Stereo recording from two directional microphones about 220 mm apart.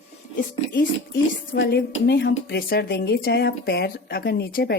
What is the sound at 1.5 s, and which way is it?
Speech, 45° left (ahead or behind).